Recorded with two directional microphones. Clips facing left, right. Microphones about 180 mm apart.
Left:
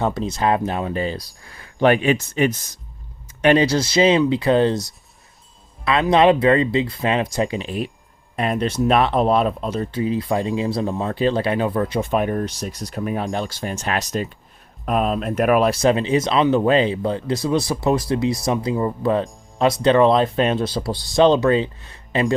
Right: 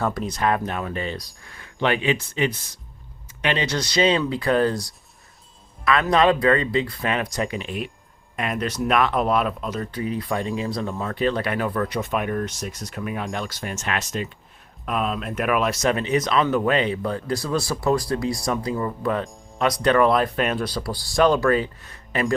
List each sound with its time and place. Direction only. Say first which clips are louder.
0.0 s speech: left 3 dB; 25° left (ahead or behind); by 3.7 s 45° left (ahead or behind)
3.7 s speech: left 4 dB; 25° left (ahead or behind)